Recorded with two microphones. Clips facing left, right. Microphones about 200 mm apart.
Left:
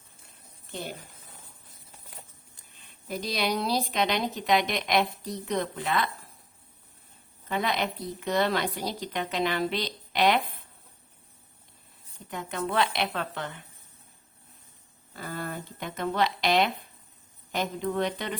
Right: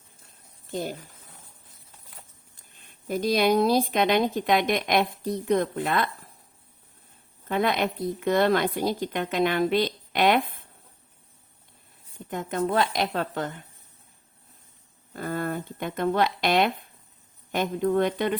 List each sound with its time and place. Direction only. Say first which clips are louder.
0.7 s speech: right 6 dB; 40° right (ahead or behind)
2.7 s speech: right 6 dB; 50° right (ahead or behind)
7.4 s speech: right 4 dB; 50° right (ahead or behind)
12.3 s speech: right 5 dB; 45° right (ahead or behind)
15.1 s speech: right 6 dB; 50° right (ahead or behind)